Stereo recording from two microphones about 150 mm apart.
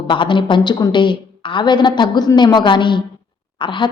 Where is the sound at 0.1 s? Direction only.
35° left (ahead or behind).